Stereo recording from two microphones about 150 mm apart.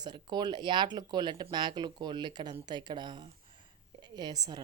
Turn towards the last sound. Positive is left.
turn(degrees=-25)  # may be behind; listen again after turning